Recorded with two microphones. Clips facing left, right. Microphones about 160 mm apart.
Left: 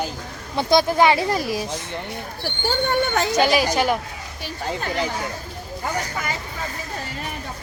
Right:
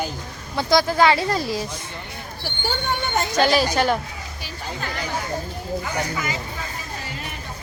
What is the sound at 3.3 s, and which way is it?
Speech, 10° left (ahead or behind).